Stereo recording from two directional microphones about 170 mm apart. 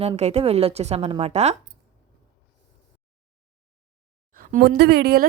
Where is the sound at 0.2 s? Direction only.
40° right (ahead or behind).